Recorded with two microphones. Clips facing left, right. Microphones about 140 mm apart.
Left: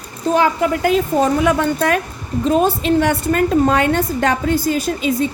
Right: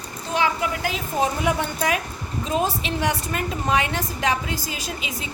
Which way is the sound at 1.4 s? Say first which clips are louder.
Left 7 dB; 60° left (ahead or behind).